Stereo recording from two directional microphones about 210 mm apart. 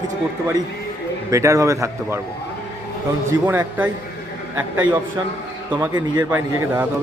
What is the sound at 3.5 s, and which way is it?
Speech, 10° right (ahead or behind).